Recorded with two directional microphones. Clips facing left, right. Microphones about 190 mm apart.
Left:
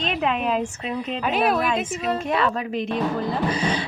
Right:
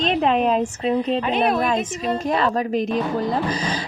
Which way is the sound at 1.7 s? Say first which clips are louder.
Right 2 dB; 40° right (ahead or behind).